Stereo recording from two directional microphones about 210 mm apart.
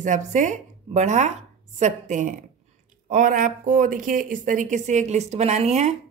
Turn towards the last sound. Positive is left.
turn(degrees=-30)  # may be behind; listen again after turning